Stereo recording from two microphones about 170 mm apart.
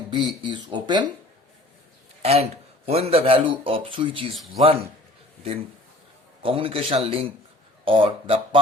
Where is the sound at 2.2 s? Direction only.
35° right (ahead or behind).